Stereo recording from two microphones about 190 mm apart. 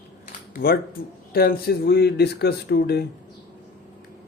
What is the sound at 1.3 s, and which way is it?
Speech, 55° left (ahead or behind).